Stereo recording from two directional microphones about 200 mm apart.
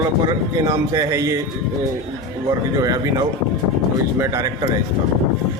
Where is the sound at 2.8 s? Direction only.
15° right (ahead or behind).